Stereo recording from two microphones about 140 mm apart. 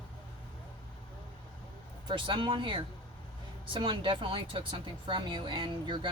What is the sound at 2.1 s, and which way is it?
A woman's voice, 35° right (ahead or behind).